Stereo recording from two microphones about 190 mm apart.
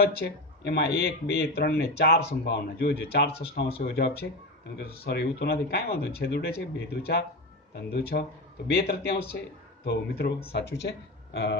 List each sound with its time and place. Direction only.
0.0 s speech: 55° left (ahead or behind)